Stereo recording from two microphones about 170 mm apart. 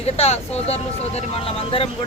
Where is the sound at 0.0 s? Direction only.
40° left (ahead or behind).